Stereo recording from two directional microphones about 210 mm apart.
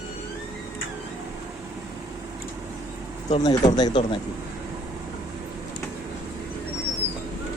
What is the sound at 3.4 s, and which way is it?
Speech, 20° left (ahead or behind).